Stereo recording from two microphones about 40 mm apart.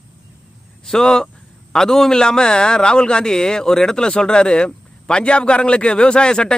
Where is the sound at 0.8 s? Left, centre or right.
Centre.